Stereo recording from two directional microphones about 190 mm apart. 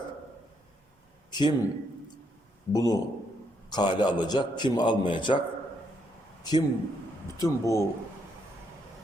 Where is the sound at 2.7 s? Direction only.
20° left (ahead or behind).